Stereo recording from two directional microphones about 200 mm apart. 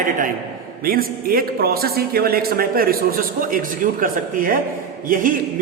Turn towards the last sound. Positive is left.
turn(degrees=-45)  # may be behind; listen again after turning